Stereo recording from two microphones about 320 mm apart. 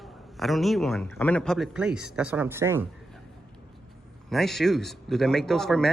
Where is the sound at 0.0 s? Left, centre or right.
Centre.